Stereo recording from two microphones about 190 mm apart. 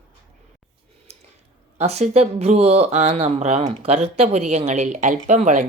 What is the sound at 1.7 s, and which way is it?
Speech, 35° right (ahead or behind).